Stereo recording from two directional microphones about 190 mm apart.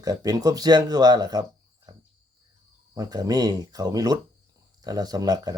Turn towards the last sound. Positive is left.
turn(degrees=-20)  # may be behind; listen again after turning